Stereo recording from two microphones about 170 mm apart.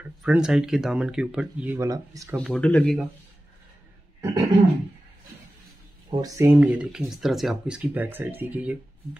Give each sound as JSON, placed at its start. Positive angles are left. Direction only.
{"t": 0.2, "sound": "speech", "side_deg": -5}
{"t": 2.4, "sound": "speech", "side_deg": 5}
{"t": 4.2, "sound": "throat clearing", "side_deg": -20}
{"t": 6.0, "sound": "speech", "side_deg": -20}